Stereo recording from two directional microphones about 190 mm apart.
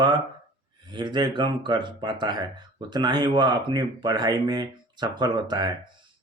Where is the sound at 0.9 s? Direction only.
25° right (ahead or behind).